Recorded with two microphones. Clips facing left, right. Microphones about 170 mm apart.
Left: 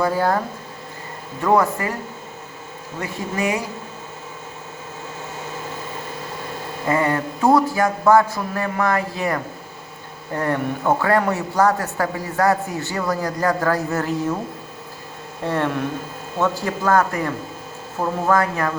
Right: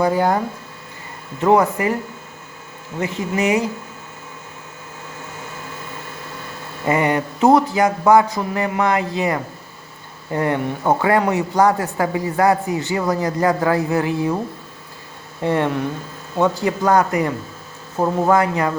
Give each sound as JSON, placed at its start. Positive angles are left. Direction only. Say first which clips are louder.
{"t": 0.0, "sound": "speech", "louder": "right 2 dB", "side_deg": -20}
{"t": 1.5, "sound": "speech", "louder": "right 3 dB", "side_deg": -20}
{"t": 3.0, "sound": "speech", "louder": "right 4 dB", "side_deg": -20}
{"t": 6.8, "sound": "speech", "louder": "right 2 dB", "side_deg": -15}
{"t": 15.4, "sound": "speech", "louder": "right 3 dB", "side_deg": -15}